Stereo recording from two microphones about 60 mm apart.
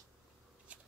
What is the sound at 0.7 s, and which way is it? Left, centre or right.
Scissors, right.